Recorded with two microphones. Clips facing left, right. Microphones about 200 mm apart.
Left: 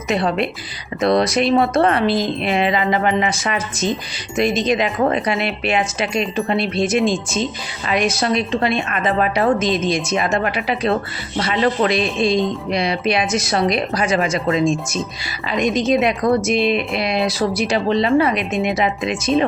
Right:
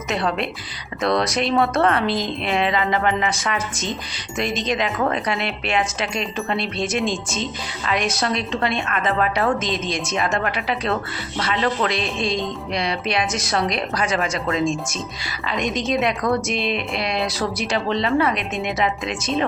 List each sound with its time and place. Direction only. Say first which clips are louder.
1.2 s a woman's voice: left 5 dB; 5° left (ahead or behind)
1.5 s speech: left 2 dB; 30° left (ahead or behind)
1.8 s a woman's voice: left 3 dB; 10° left (ahead or behind)